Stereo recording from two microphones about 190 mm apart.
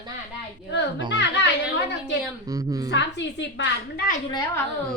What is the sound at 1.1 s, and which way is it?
A woman's voice, 65° left (ahead or behind).